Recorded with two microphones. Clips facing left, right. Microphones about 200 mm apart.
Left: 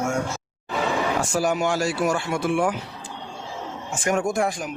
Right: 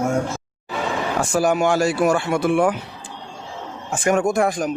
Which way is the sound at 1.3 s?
60° right (ahead or behind).